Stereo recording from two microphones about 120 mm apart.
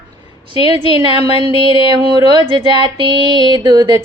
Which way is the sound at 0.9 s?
40° right (ahead or behind).